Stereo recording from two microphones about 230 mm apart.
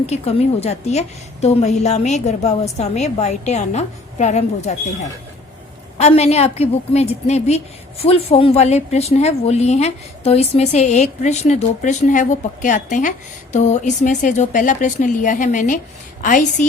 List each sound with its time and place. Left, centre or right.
0.0 s a woman's voice: left
6.0 s a woman's voice: left